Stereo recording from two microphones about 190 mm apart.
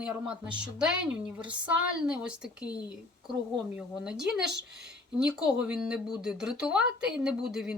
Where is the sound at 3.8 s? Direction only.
5° right (ahead or behind).